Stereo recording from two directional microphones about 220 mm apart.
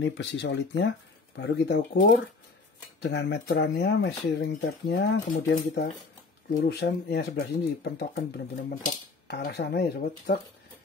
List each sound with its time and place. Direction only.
0.0 s speech: 50° left (ahead or behind)